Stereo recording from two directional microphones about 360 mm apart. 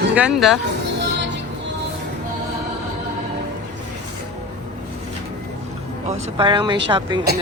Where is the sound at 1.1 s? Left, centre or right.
Right.